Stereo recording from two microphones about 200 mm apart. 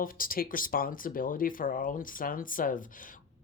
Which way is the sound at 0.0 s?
45° left (ahead or behind).